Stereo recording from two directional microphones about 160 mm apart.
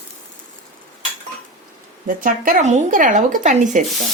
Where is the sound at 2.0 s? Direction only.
60° right (ahead or behind).